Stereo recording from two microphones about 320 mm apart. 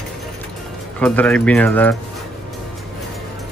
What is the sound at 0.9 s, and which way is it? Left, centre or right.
Speech, centre.